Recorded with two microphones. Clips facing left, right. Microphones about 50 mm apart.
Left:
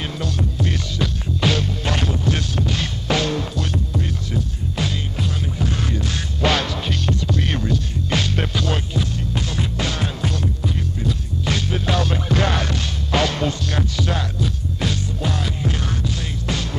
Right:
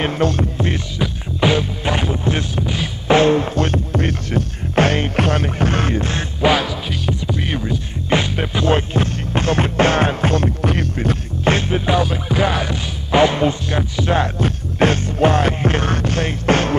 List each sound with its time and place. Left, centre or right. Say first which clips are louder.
0.0 s music: right 8 dB; right
0.9 s music: right 1 dB; centre
3.1 s music: right 9 dB; right
3.5 s music: right 6 dB; right
6.4 s music: right 4 dB; centre
8.6 s music: right 7 dB; right
11.5 s music: right 5 dB; right
11.8 s music: right 4 dB; centre
14.1 s music: right 6 dB; right